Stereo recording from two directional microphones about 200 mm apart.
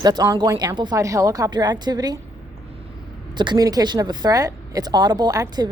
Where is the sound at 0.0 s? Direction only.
20° right (ahead or behind).